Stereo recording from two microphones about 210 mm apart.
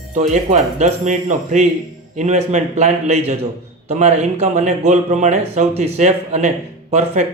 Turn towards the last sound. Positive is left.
turn(degrees=-30)  # may be behind; listen again after turning